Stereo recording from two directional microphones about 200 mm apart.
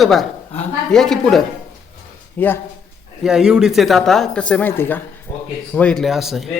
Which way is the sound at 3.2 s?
5° right (ahead or behind).